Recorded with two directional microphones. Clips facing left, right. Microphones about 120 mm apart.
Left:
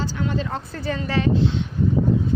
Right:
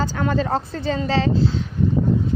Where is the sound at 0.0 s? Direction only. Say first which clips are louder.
Right 4 dB; 45° right (ahead or behind).